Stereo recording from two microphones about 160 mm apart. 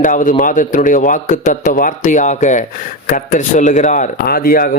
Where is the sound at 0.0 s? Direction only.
55° left (ahead or behind).